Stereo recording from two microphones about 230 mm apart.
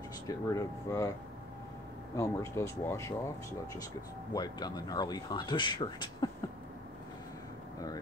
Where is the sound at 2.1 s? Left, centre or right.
Centre.